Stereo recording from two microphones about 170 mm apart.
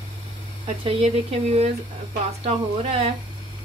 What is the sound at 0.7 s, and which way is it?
Speech, 35° right (ahead or behind).